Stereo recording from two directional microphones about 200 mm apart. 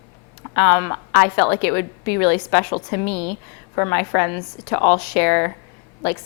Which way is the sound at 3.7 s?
15° left (ahead or behind).